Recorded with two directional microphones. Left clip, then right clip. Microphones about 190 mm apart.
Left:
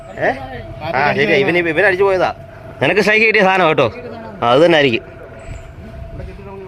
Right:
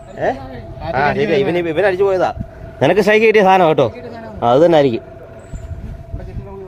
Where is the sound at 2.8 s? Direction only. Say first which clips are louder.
Right 1 dB; 25° right (ahead or behind).